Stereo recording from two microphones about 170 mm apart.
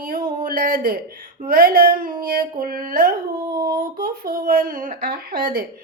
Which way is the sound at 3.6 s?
25° right (ahead or behind).